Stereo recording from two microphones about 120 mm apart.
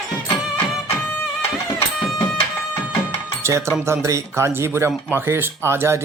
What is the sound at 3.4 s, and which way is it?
Speech, 25° right (ahead or behind).